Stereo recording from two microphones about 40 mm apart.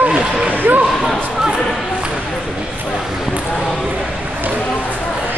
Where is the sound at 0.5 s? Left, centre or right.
Right.